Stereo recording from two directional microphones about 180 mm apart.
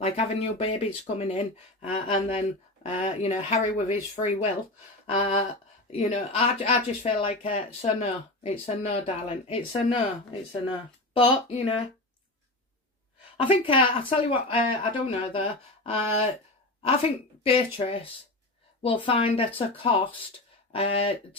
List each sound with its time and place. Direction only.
0.0 s speech: 35° left (ahead or behind)
13.4 s speech: 30° left (ahead or behind)
17.4 s speech: 30° left (ahead or behind)